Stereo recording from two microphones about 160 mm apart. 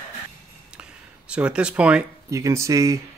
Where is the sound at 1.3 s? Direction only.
5° right (ahead or behind).